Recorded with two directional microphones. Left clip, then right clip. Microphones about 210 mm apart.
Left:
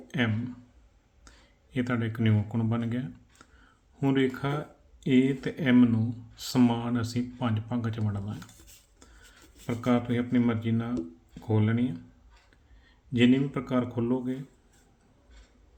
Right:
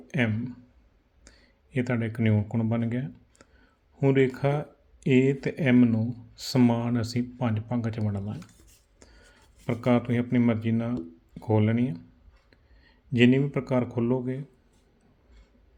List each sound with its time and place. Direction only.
0.1 s speech: 30° right (ahead or behind)
1.7 s speech: 25° right (ahead or behind)
9.6 s speech: 35° right (ahead or behind)
13.1 s speech: 35° right (ahead or behind)